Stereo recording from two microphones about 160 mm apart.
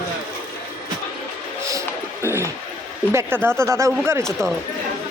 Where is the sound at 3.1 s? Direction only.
15° right (ahead or behind).